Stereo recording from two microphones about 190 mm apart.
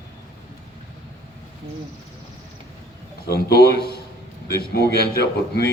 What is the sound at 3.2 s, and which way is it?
A man's voice, 55° left (ahead or behind).